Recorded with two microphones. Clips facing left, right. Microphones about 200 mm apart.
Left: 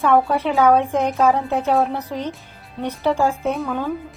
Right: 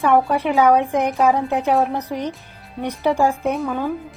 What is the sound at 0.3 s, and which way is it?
A woman's voice, 15° right (ahead or behind).